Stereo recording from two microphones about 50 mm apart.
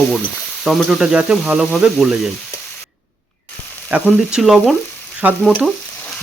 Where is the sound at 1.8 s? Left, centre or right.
Centre.